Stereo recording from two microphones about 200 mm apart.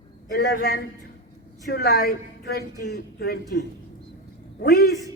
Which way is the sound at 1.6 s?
55° left (ahead or behind).